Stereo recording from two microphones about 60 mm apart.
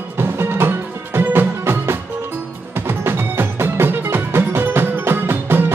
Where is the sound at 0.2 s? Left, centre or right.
Right.